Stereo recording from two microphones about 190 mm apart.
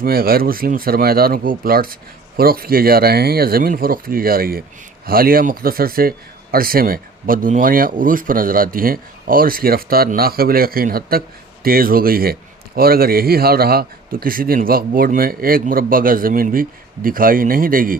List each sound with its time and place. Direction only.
0.0 s a man's voice: 50° right (ahead or behind)